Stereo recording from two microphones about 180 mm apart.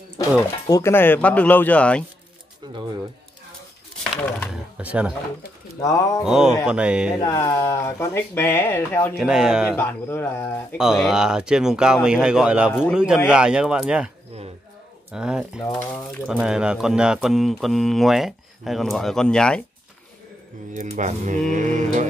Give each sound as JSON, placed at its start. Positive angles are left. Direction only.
{"t": 0.7, "sound": "speech", "side_deg": 15}
{"t": 2.6, "sound": "speech", "side_deg": -25}
{"t": 4.7, "sound": "speech", "side_deg": -5}
{"t": 5.8, "sound": "speech", "side_deg": 20}
{"t": 6.2, "sound": "speech", "side_deg": -5}
{"t": 7.2, "sound": "speech", "side_deg": 20}
{"t": 9.2, "sound": "speech", "side_deg": -5}
{"t": 9.8, "sound": "speech", "side_deg": 10}
{"t": 10.8, "sound": "speech", "side_deg": -5}
{"t": 20.7, "sound": "speech", "side_deg": -40}
{"t": 21.5, "sound": "mantra", "side_deg": -45}